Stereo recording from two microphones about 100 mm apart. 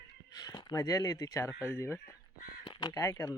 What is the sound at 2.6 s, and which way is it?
Crow, 50° left (ahead or behind).